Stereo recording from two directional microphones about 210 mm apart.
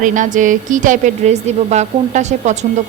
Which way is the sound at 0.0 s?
35° right (ahead or behind).